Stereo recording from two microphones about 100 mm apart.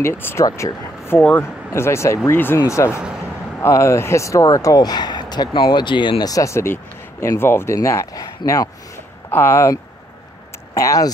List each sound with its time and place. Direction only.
0.0 s speech: 25° left (ahead or behind)
0.5 s speech: 35° left (ahead or behind)
9.3 s speech: 25° left (ahead or behind)